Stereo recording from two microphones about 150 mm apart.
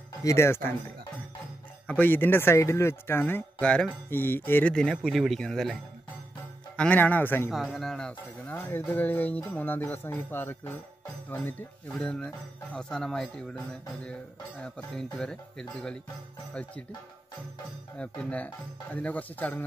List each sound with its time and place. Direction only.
0.2 s speech: 20° left (ahead or behind)
1.9 s speech: 10° left (ahead or behind)
6.8 s speech: 10° left (ahead or behind)
7.5 s a man's voice: centre (ahead or behind)
15.1 s a man's voice: 5° left (ahead or behind)
17.9 s speech: 10° left (ahead or behind)